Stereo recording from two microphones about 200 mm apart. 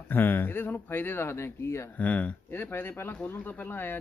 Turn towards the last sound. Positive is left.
turn(degrees=10)  # may be behind; listen again after turning